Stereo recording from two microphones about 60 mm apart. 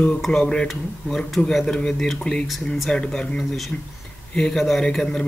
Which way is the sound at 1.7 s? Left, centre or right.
Centre.